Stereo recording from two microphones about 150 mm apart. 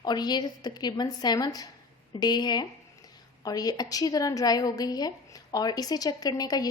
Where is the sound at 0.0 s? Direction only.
30° left (ahead or behind).